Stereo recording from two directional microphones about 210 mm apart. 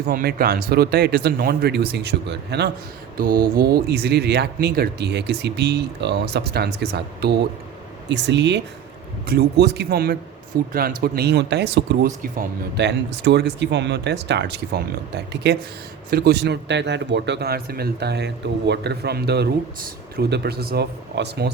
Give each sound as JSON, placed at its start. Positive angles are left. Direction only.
{"t": 0.1, "sound": "speech", "side_deg": -45}
{"t": 3.2, "sound": "speech", "side_deg": -45}
{"t": 12.0, "sound": "speech", "side_deg": -40}